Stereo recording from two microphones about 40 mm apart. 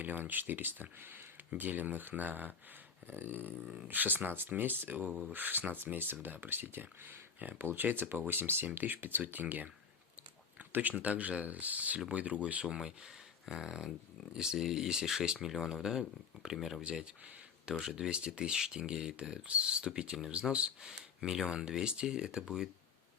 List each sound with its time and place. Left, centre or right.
0.0 s speech: right
3.1 s speech: right
8.8 s speech: right
10.7 s speech: right
12.6 s speech: centre
17.7 s speech: right
19.5 s speech: right
20.8 s speech: centre